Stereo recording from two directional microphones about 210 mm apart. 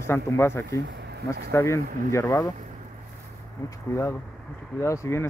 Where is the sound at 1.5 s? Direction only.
10° left (ahead or behind).